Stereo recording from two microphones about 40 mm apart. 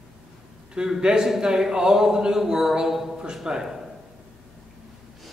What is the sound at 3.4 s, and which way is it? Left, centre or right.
Speech, right.